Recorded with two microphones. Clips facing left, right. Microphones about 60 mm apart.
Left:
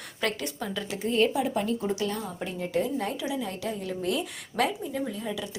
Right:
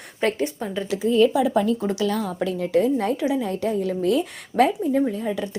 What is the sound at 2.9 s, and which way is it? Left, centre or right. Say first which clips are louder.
A woman's voice: right 8 dB; right.